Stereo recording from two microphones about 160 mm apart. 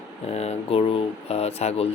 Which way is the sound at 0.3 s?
40° left (ahead or behind).